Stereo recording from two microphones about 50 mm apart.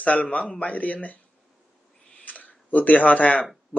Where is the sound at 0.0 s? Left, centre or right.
Left.